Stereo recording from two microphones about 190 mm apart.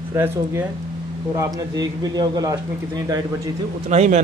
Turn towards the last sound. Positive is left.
turn(degrees=-35)  # may be behind; listen again after turning